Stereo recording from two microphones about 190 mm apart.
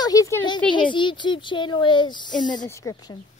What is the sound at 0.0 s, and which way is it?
A woman's voice, 20° left (ahead or behind).